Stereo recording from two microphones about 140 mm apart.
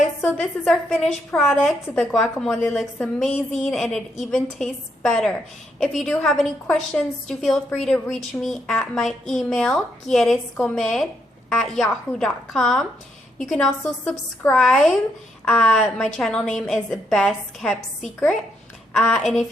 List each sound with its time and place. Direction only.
0.2 s a woman's voice: 5° left (ahead or behind)